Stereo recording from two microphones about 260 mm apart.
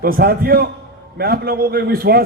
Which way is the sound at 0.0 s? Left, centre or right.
Right.